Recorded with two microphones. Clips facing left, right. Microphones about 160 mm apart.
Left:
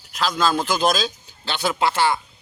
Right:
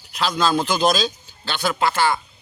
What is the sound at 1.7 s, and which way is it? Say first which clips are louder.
Speech: even; 25° left (ahead or behind).